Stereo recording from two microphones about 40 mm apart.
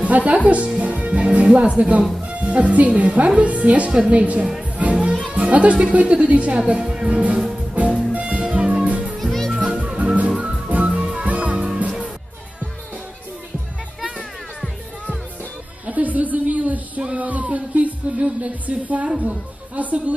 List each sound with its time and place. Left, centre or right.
0.0 s a woman's voice: right
0.8 s music: right
1.8 s a woman's voice: right
4.8 s music: right
5.9 s a woman's voice: right
6.9 s music: right
9.2 s music: centre
9.5 s music: right
15.9 s a sound: right
17.2 s music: right
19.7 s a woman's voice: right